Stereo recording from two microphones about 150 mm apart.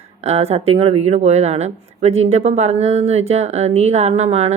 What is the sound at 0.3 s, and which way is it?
A woman's voice, 45° right (ahead or behind).